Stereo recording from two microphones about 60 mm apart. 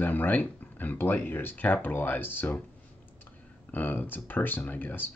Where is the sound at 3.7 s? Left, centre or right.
Left.